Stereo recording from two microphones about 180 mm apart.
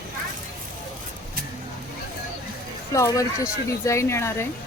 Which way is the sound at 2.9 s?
20° left (ahead or behind).